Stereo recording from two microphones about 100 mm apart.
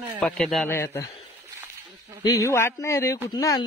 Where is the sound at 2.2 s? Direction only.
30° left (ahead or behind).